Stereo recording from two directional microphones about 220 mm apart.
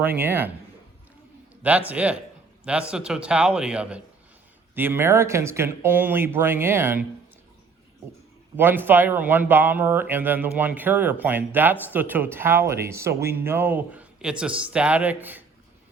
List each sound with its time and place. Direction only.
0.0 s a man's voice: 10° right (ahead or behind)
1.9 s a man's voice: 5° right (ahead or behind)
8.5 s a man's voice: 10° right (ahead or behind)